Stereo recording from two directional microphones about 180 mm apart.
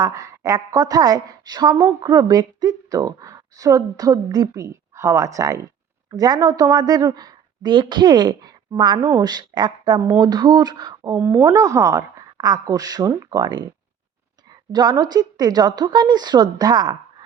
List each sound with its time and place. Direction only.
0.0 s a woman's voice: 20° right (ahead or behind)
14.7 s a woman's voice: 20° right (ahead or behind)